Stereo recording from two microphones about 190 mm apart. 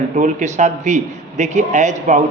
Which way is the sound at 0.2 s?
40° right (ahead or behind).